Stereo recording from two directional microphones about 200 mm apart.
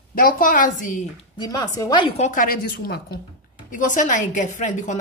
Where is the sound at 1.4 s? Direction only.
20° left (ahead or behind).